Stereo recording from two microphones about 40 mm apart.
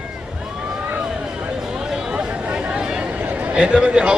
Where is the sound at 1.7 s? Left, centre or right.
Centre.